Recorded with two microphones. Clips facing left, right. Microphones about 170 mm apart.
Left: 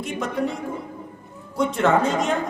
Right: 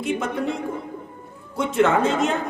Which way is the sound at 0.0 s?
Centre (ahead or behind).